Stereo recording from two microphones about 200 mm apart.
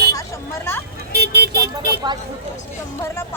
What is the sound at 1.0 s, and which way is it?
Vehicle, 55° right (ahead or behind).